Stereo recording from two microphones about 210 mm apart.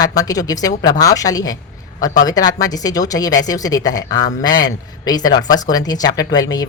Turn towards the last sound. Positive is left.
turn(degrees=15)  # may be behind; listen again after turning